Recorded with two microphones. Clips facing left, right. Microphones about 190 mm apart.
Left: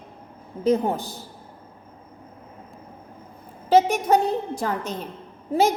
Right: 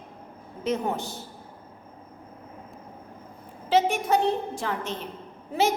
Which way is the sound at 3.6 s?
40° left (ahead or behind).